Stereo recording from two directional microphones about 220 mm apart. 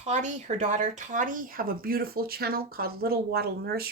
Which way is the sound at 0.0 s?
30° right (ahead or behind).